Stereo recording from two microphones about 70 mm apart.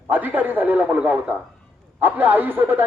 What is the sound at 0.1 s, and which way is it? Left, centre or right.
A man's voice, right.